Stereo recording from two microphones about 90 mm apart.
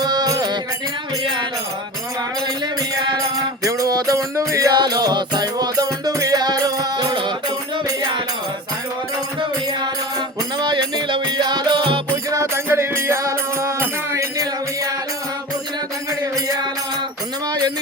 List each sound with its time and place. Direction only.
0.0 s music: 50° right (ahead or behind)
3.6 s music: 40° right (ahead or behind)
4.7 s music: 50° right (ahead or behind)
6.9 s music: 55° right (ahead or behind)
9.4 s music: 55° right (ahead or behind)
12.1 s music: 35° right (ahead or behind)
16.2 s music: 45° right (ahead or behind)